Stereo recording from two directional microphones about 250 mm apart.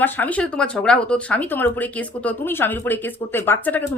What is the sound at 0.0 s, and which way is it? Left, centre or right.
Speech, centre.